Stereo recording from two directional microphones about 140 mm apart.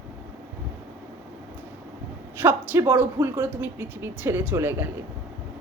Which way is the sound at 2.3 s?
15° right (ahead or behind).